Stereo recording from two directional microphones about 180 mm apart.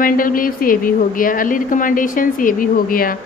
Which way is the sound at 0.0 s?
50° left (ahead or behind).